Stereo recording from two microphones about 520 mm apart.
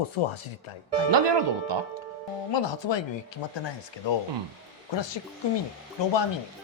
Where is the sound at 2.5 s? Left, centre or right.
Left.